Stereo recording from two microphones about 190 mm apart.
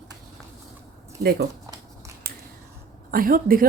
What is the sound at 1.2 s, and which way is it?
Speech, 55° right (ahead or behind).